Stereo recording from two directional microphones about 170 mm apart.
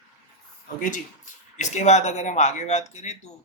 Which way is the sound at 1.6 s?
45° left (ahead or behind).